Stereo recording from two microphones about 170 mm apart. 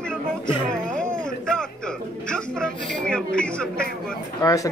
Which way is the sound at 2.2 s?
5° left (ahead or behind).